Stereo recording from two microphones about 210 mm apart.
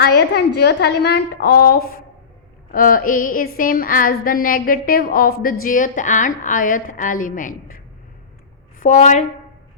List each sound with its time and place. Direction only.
0.0 s a sound: 50° left (ahead or behind)
5.6 s a woman's voice: 40° left (ahead or behind)
8.8 s a woman's voice: 35° left (ahead or behind)